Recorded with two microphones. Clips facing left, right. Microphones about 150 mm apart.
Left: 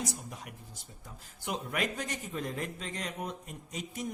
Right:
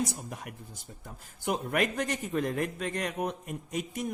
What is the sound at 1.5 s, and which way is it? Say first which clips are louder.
A man's voice: right 5 dB; 55° right (ahead or behind).